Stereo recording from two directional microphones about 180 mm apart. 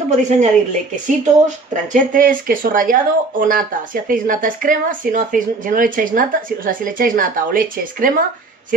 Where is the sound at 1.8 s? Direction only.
50° right (ahead or behind).